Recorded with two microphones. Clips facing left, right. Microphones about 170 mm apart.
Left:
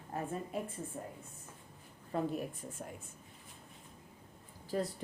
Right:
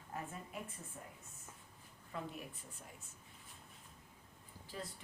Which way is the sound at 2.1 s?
40° left (ahead or behind).